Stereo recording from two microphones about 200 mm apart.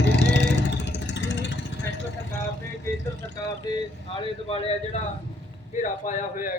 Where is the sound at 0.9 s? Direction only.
60° left (ahead or behind).